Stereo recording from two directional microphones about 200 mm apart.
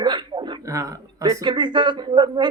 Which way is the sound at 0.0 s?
25° right (ahead or behind).